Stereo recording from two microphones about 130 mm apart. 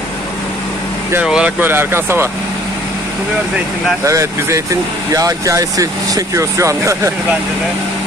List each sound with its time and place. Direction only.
1.2 s speech: 5° right (ahead or behind)
4.0 s speech: 25° right (ahead or behind)